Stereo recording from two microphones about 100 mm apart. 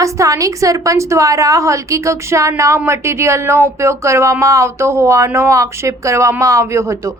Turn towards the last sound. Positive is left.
turn(degrees=-30)  # may be behind; listen again after turning